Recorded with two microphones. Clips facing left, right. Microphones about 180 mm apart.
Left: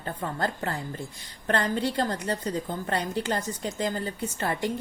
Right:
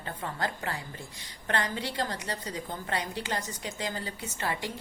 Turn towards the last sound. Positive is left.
turn(degrees=50)  # may be behind; listen again after turning